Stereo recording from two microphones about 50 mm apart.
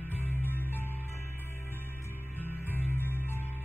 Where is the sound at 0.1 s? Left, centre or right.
Left.